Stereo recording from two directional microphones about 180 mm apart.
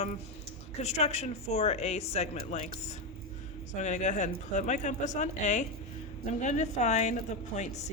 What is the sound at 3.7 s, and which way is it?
Speech, 40° left (ahead or behind).